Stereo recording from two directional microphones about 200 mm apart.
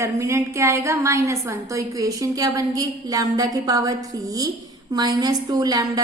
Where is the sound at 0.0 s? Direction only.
15° right (ahead or behind).